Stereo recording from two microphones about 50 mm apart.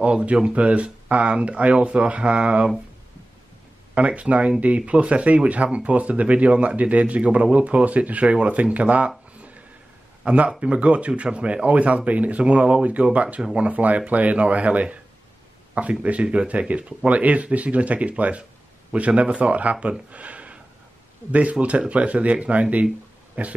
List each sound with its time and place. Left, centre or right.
0.0 s speech: right
3.9 s speech: right
10.2 s speech: right